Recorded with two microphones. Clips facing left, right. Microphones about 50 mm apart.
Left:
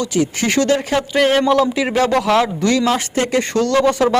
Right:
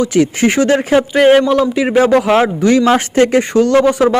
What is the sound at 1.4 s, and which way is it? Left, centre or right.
Speech, centre.